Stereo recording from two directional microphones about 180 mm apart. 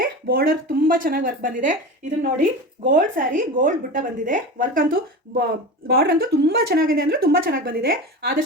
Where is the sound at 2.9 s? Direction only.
45° right (ahead or behind).